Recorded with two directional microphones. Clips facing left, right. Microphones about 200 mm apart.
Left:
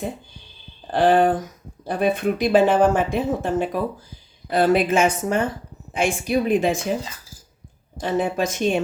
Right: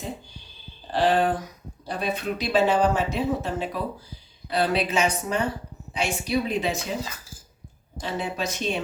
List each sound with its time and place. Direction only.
0.9 s speech: 50° left (ahead or behind)
8.0 s speech: 50° left (ahead or behind)